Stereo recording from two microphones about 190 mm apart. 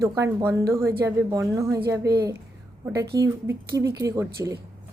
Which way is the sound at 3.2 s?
15° right (ahead or behind).